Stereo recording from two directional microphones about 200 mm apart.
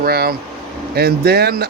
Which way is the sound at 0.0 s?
50° right (ahead or behind).